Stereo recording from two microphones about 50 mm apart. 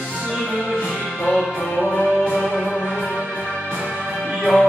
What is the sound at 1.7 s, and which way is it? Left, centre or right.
Music, left.